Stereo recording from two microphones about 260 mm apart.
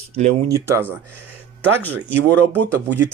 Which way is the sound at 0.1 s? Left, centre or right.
Right.